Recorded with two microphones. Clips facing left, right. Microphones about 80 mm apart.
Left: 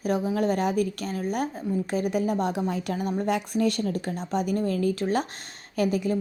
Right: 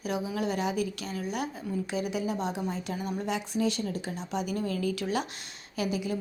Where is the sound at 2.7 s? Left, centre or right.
Left.